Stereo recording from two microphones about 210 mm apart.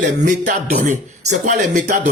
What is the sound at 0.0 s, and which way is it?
Speech, 35° right (ahead or behind).